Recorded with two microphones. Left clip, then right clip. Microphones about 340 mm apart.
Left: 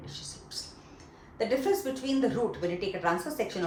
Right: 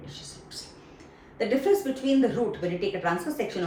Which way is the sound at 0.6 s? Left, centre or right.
Centre.